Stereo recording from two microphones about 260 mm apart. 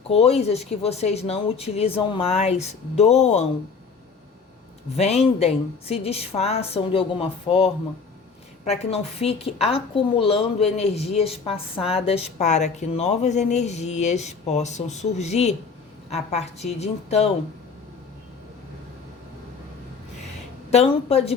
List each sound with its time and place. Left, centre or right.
0.1 s a woman's voice: left
4.9 s a woman's voice: left
20.7 s a woman's voice: left